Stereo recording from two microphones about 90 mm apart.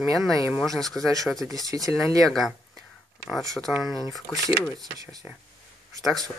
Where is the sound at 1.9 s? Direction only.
Centre (ahead or behind).